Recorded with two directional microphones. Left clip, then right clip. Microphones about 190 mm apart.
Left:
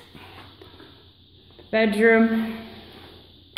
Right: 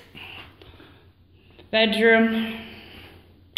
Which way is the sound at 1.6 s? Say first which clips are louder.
Even; 20° left (ahead or behind).